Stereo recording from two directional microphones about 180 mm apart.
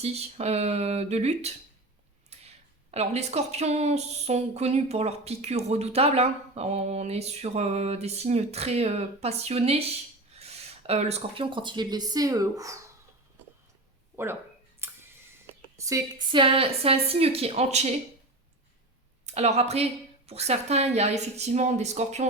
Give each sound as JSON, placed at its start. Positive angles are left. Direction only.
{"t": 0.0, "sound": "a woman's voice", "side_deg": -35}
{"t": 2.3, "sound": "a sound", "side_deg": -35}
{"t": 2.9, "sound": "a woman's voice", "side_deg": -35}
{"t": 14.8, "sound": "a sound", "side_deg": -15}
{"t": 15.8, "sound": "a woman's voice", "side_deg": -20}
{"t": 19.2, "sound": "a woman's voice", "side_deg": -40}